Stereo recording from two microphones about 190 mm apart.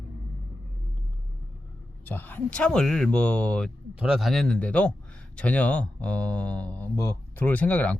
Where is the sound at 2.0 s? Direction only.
10° left (ahead or behind).